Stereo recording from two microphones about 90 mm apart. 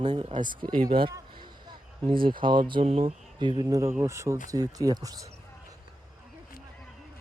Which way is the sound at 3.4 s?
60° right (ahead or behind).